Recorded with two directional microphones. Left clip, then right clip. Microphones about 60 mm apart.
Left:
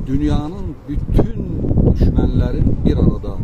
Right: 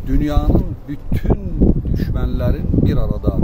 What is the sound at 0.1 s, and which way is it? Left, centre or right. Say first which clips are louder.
A man's voice: right 1 dB; right.